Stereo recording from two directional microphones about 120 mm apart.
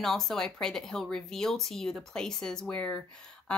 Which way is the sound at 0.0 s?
Centre (ahead or behind).